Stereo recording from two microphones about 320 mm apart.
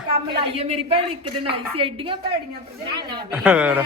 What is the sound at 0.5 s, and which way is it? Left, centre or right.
A woman's voice, centre.